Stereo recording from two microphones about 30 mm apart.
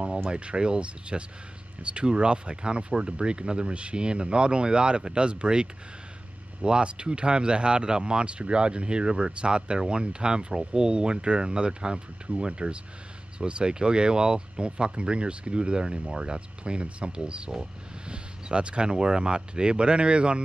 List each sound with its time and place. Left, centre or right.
0.3 s speech: right